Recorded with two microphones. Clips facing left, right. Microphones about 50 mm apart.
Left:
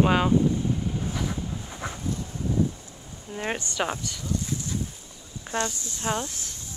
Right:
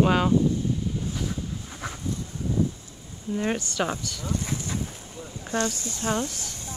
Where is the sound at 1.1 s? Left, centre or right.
Left.